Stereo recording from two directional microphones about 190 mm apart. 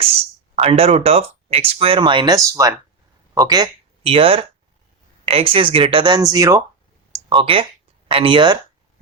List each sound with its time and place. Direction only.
0.5 s speech: 30° right (ahead or behind)